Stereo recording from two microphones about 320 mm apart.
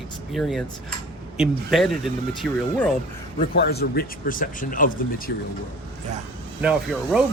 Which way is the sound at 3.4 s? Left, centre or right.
Left.